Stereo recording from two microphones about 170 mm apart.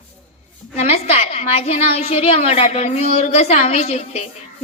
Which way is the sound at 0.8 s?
40° left (ahead or behind).